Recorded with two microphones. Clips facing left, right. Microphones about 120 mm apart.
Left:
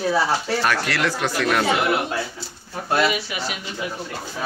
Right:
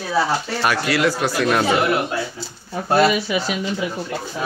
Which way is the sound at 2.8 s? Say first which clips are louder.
Right 5 dB; 35° right (ahead or behind).